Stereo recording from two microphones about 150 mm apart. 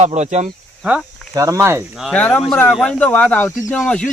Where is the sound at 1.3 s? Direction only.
20° right (ahead or behind).